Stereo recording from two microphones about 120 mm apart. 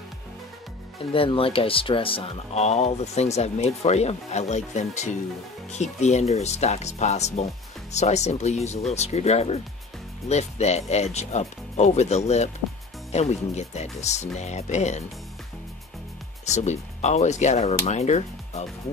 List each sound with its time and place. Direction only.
1.1 s speech: 50° left (ahead or behind); by 15.0 s 70° left (ahead or behind)
16.4 s speech: 75° left (ahead or behind)